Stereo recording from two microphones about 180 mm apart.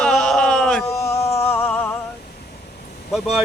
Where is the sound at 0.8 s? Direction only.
15° left (ahead or behind).